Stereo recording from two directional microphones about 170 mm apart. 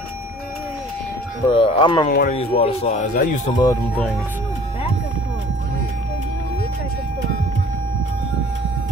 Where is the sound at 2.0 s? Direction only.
50° left (ahead or behind).